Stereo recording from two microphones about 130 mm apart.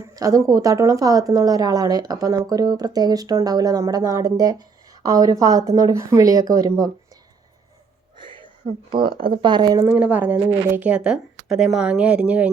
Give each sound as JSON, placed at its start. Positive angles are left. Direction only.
{"t": 0.0, "sound": "a woman's voice", "side_deg": -25}
{"t": 8.2, "sound": "a sound", "side_deg": -40}
{"t": 8.9, "sound": "speech", "side_deg": -40}
{"t": 9.8, "sound": "speech", "side_deg": -10}